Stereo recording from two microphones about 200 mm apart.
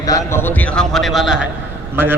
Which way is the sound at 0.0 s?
15° left (ahead or behind).